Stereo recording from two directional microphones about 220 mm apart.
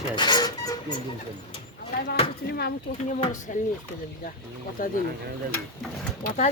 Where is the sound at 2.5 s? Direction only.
45° left (ahead or behind).